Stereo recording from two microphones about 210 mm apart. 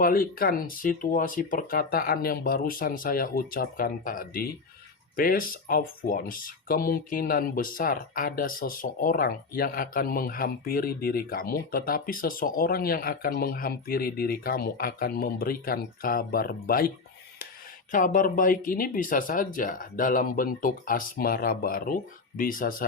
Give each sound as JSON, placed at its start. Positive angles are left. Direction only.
{"t": 0.0, "sound": "speech", "side_deg": 45}
{"t": 17.9, "sound": "speech", "side_deg": 40}